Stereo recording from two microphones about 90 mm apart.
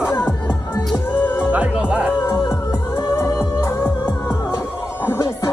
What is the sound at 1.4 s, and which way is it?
Music, 15° right (ahead or behind).